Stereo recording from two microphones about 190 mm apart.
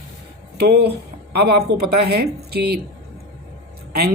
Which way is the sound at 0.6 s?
60° right (ahead or behind).